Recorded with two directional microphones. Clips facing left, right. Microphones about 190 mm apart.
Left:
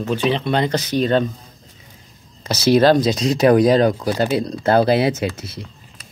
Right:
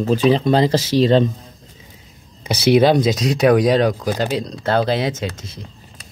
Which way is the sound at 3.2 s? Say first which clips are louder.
Left 1 dB; centre (ahead or behind).